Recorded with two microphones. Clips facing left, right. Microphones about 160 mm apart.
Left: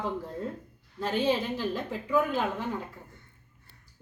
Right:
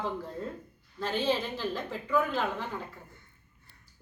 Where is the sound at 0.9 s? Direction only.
10° left (ahead or behind).